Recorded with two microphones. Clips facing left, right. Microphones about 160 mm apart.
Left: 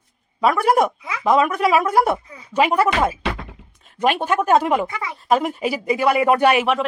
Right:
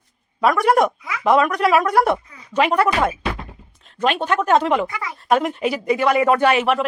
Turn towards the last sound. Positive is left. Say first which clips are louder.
# right 1 dB
turn(degrees=0)  # may be behind; listen again after turning